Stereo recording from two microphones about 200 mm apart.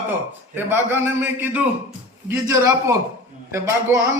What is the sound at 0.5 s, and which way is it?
A man's voice, 10° right (ahead or behind).